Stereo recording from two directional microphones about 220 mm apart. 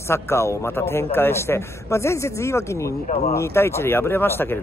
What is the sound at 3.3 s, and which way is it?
A man's voice, 10° left (ahead or behind).